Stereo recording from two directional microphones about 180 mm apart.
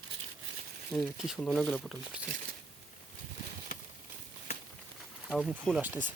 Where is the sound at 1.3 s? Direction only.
10° left (ahead or behind).